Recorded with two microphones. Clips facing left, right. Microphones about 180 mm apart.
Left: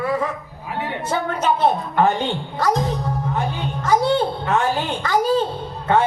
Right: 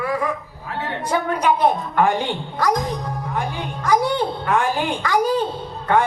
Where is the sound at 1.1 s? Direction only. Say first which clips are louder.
Right 2 dB; 10° right (ahead or behind).